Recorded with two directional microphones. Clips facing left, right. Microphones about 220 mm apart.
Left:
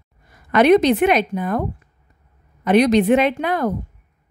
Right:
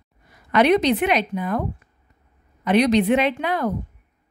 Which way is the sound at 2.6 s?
45° left (ahead or behind).